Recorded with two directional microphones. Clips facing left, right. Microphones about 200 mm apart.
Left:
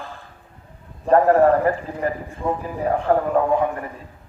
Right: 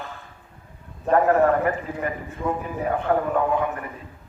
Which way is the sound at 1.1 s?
35° left (ahead or behind).